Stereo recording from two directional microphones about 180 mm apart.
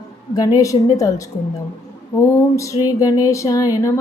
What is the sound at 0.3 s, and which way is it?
Music, 20° left (ahead or behind).